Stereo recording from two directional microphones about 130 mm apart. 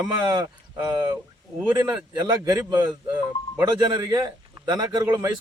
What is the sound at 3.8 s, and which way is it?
A man's voice, 30° right (ahead or behind).